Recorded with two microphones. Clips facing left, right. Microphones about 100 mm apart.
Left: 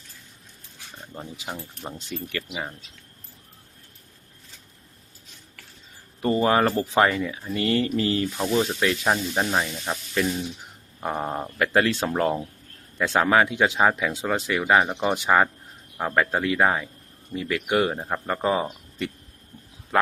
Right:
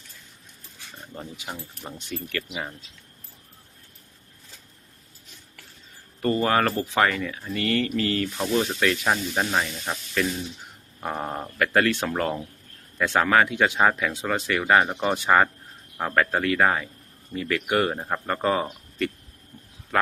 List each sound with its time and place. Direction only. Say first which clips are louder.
1.1 s speech: left 1 dB; 15° left (ahead or behind)
6.2 s speech: left 2 dB; 20° left (ahead or behind)
7.2 s speech: left 2 dB; 15° left (ahead or behind)
9.0 s speech: left 1 dB; 5° left (ahead or behind)
14.3 s speech: even; 20° left (ahead or behind)